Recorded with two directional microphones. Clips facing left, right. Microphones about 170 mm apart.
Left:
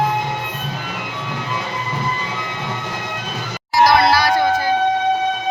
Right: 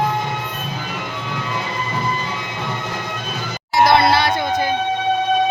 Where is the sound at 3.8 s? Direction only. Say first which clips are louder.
Even; 25° right (ahead or behind).